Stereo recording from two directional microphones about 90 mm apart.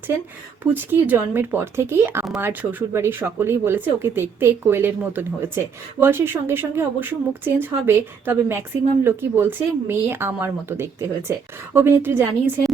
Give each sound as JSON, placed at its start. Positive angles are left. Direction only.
{"t": 0.6, "sound": "speech", "side_deg": -20}